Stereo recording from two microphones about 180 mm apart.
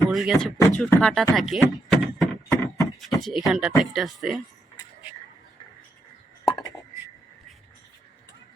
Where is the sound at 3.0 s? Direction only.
Centre (ahead or behind).